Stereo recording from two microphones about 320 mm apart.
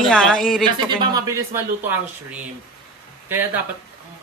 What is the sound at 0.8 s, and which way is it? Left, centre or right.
Speech, centre.